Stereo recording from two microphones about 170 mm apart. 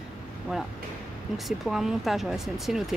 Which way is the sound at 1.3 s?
Centre (ahead or behind).